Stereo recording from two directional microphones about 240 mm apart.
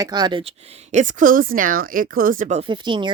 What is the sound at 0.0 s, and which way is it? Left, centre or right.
Speech, centre.